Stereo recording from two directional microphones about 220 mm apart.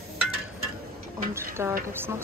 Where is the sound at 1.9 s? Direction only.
10° right (ahead or behind).